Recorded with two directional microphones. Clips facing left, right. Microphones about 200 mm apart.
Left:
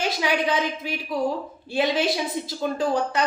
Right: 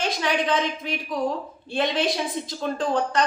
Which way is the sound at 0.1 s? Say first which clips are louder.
Right 1 dB; 5° left (ahead or behind).